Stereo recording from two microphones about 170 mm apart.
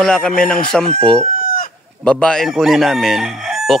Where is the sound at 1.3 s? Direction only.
55° left (ahead or behind).